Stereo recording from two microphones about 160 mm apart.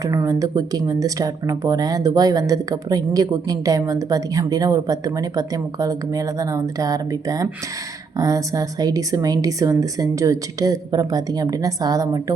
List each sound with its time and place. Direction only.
0.0 s speech: 20° right (ahead or behind)